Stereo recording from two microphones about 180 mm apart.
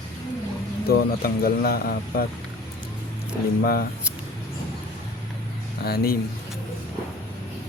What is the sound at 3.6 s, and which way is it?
Speech, 55° left (ahead or behind).